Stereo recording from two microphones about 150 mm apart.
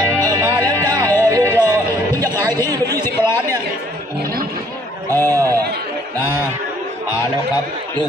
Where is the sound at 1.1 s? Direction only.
15° left (ahead or behind).